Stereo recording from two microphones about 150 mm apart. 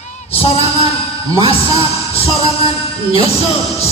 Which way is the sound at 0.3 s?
40° left (ahead or behind).